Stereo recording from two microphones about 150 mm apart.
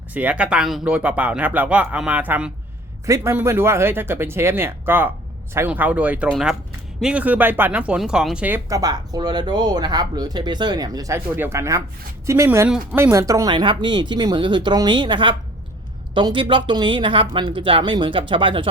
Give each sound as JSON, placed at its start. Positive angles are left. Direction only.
{"t": 0.1, "sound": "speech", "side_deg": -10}
{"t": 8.7, "sound": "speech", "side_deg": -25}
{"t": 13.5, "sound": "speech", "side_deg": -30}